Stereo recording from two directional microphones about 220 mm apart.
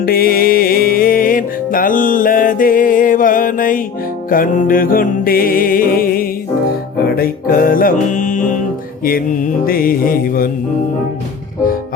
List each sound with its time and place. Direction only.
0.0 s music: 40° left (ahead or behind)